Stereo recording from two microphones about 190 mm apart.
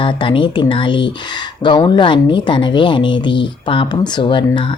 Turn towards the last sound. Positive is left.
turn(degrees=25)  # may be behind; listen again after turning